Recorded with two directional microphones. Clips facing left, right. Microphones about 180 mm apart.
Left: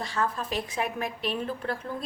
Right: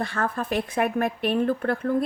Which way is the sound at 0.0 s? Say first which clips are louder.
Right 3 dB; 55° right (ahead or behind).